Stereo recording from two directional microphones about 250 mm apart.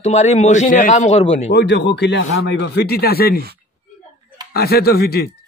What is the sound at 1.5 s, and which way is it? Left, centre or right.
Speech, left.